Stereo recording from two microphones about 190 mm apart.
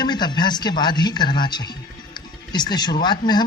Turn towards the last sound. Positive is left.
turn(degrees=25)  # may be behind; listen again after turning